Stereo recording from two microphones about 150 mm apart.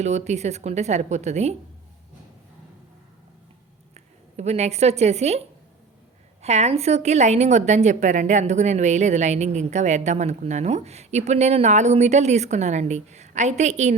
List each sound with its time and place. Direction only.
0.0 s a woman's voice: 50° right (ahead or behind)
3.9 s a woman's voice: 45° right (ahead or behind)
6.4 s a woman's voice: 45° right (ahead or behind)